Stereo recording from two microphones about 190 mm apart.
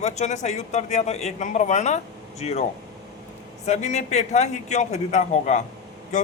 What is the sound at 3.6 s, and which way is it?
Speech, 35° left (ahead or behind).